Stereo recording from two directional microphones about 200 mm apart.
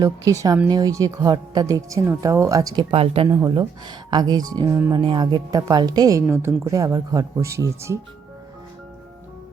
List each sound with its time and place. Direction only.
0.0 s speech: 15° right (ahead or behind)
2.9 s speech: 30° right (ahead or behind)
3.2 s speech: 20° right (ahead or behind)